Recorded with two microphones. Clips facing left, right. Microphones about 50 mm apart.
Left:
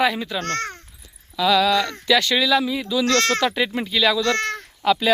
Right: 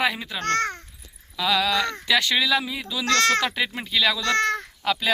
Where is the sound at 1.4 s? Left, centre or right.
Centre.